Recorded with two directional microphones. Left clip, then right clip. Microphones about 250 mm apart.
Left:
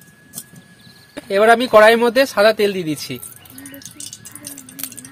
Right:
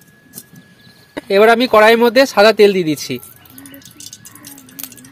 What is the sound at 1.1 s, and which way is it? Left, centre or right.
Speech, right.